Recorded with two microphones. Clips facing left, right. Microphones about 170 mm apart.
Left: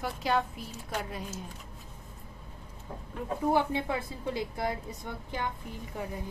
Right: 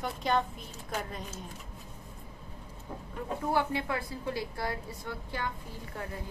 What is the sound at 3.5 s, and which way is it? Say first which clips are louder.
A woman's voice: left 1 dB; 20° left (ahead or behind).